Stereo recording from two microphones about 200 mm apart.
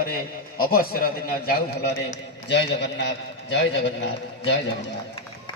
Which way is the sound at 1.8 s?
60° left (ahead or behind).